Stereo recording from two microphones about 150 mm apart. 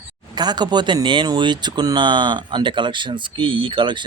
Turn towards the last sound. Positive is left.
turn(degrees=-35)  # may be behind; listen again after turning